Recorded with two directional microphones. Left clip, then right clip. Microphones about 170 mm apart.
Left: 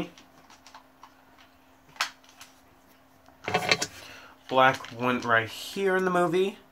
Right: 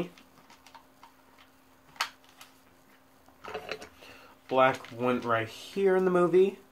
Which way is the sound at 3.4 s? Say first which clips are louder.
Left 13 dB; 70° left (ahead or behind).